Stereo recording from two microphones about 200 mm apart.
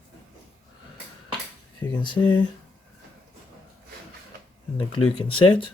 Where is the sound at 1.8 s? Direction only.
25° left (ahead or behind).